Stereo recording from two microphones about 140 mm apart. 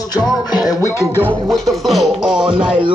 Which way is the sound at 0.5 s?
25° left (ahead or behind).